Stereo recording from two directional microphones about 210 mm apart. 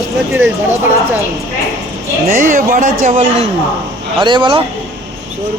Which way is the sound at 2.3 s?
40° right (ahead or behind).